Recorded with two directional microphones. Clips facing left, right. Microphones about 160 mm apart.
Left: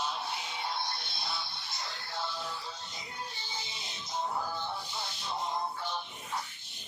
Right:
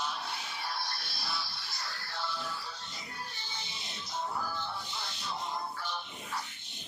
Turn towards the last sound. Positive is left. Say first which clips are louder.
# left 2 dB
turn(degrees=20)  # may be behind; listen again after turning